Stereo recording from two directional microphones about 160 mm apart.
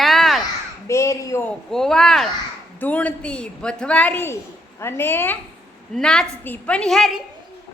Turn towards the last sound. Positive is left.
turn(degrees=0)  # may be behind; listen again after turning